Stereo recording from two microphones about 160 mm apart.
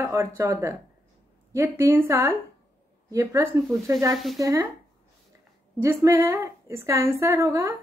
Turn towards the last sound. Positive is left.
turn(degrees=-15)  # may be behind; listen again after turning